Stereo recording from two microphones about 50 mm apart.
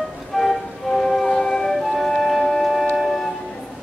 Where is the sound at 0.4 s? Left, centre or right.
Centre.